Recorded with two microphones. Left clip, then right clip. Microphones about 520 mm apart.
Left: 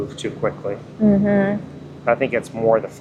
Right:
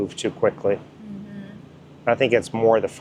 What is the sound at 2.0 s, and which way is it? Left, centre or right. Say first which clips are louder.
Speech: even; right.